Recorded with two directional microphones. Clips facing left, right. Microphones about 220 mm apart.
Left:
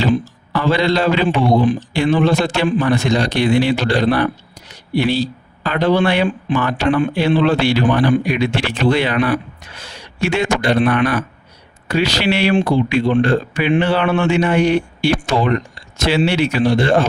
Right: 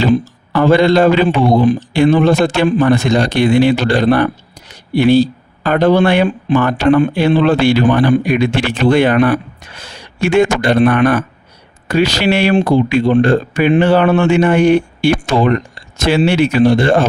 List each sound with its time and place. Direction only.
0.0 s speech: 50° right (ahead or behind)